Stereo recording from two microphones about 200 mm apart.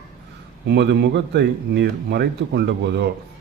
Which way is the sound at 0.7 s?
55° right (ahead or behind).